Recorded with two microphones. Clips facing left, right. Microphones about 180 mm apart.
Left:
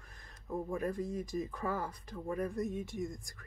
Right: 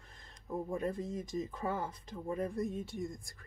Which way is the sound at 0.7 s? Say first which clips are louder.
Left 1 dB; 25° right (ahead or behind).